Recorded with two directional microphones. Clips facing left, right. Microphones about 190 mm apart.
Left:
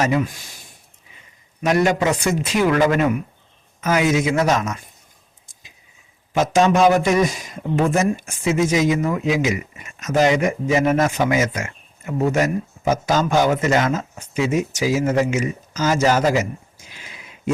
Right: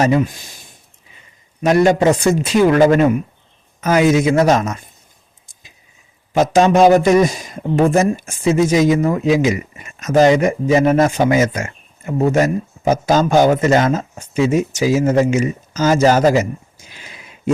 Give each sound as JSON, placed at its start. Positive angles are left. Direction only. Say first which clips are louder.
{"t": 0.0, "sound": "speech", "louder": "right 5 dB", "side_deg": -30}
{"t": 1.6, "sound": "speech", "louder": "right 5 dB", "side_deg": -30}
{"t": 6.3, "sound": "speech", "louder": "right 4 dB", "side_deg": -35}